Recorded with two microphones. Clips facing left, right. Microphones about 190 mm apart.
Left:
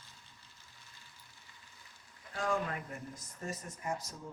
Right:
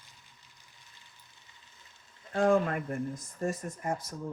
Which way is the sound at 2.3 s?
50° right (ahead or behind).